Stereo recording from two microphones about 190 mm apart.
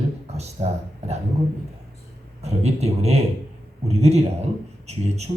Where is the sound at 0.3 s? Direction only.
35° right (ahead or behind).